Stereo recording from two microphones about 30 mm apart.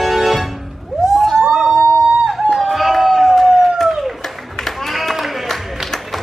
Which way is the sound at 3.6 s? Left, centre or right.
Centre.